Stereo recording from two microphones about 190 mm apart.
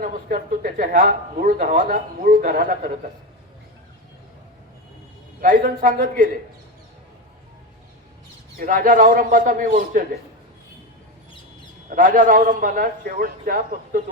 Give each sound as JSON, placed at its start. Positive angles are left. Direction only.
{"t": 0.0, "sound": "speech", "side_deg": -50}
{"t": 5.4, "sound": "speech", "side_deg": -45}
{"t": 8.5, "sound": "speech", "side_deg": -45}
{"t": 11.9, "sound": "speech", "side_deg": -45}